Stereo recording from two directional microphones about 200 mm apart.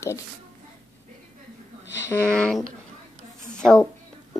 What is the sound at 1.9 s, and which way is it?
A woman's voice, 15° left (ahead or behind).